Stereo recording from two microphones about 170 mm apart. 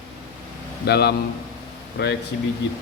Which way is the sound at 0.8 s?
70° left (ahead or behind).